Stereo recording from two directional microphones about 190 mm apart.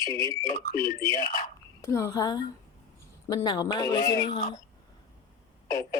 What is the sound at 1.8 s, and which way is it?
A woman's voice, 15° left (ahead or behind).